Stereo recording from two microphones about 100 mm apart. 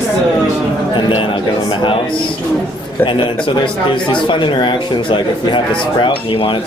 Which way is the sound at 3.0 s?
55° left (ahead or behind).